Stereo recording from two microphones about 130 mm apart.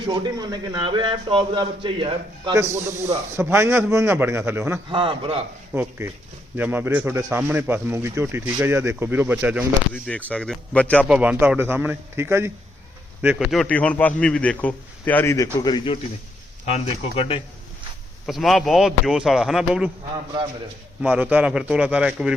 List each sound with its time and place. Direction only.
0.0 s speech: 35° right (ahead or behind)
2.5 s a man's voice: 25° right (ahead or behind)
4.9 s speech: 40° right (ahead or behind)
5.7 s speech: 15° right (ahead or behind)
9.9 s a man's voice: 10° left (ahead or behind)
11.1 s speech: 10° right (ahead or behind)
13.5 s a man's voice: 5° left (ahead or behind)
15.6 s a man's voice: 35° left (ahead or behind)
16.7 s speech: 50° left (ahead or behind)
18.3 s speech: centre (ahead or behind)
21.0 s speech: 10° right (ahead or behind)